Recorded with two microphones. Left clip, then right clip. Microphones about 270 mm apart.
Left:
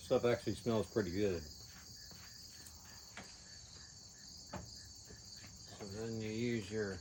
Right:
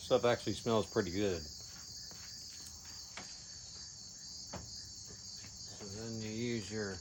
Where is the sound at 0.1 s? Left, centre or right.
Centre.